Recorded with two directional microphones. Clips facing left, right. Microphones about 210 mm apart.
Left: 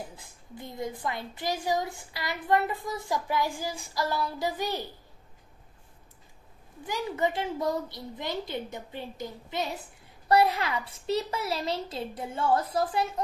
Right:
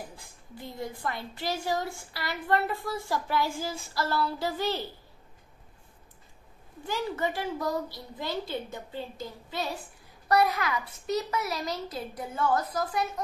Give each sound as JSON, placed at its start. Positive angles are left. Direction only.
{"t": 0.1, "sound": "a woman's voice", "side_deg": 20}
{"t": 6.9, "sound": "a child's voice", "side_deg": 15}